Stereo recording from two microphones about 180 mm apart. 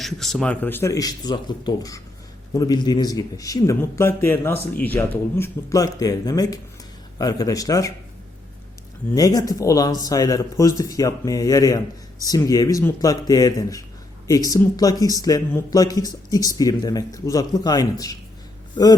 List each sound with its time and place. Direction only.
0.0 s speech: centre (ahead or behind); by 7.9 s 20° left (ahead or behind)
9.1 s speech: 20° left (ahead or behind)